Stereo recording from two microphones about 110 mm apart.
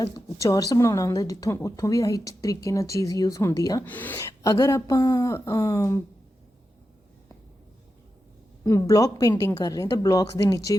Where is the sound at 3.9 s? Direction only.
15° left (ahead or behind).